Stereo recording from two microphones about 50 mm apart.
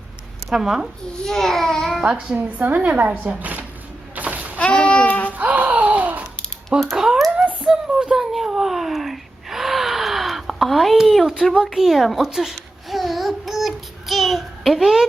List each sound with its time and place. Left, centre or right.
0.5 s a woman's voice: centre
1.2 s a child's voice: centre
2.0 s speech: right
4.1 s a sound: right
4.5 s a sound: left
5.4 s music: right
6.9 s a woman's voice: centre
7.6 s a sound: centre
8.2 s gasp: centre
10.9 s speech: centre
11.6 s babbling: centre